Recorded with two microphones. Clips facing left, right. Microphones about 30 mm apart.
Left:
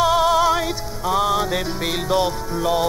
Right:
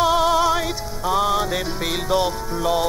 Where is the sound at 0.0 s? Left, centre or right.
Centre.